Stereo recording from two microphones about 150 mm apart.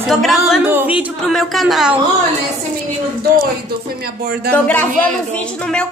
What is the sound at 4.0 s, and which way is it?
Speech, 90° right.